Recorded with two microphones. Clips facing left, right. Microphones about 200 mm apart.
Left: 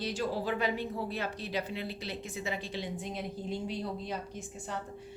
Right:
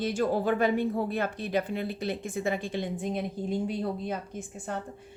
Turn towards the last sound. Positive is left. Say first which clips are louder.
# right 4 dB
turn(degrees=-50)  # may be behind; listen again after turning